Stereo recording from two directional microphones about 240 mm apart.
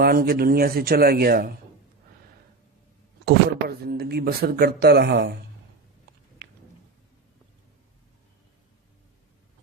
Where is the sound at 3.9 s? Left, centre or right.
Right.